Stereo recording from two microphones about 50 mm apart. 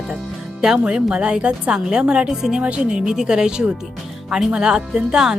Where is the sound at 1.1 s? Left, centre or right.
Centre.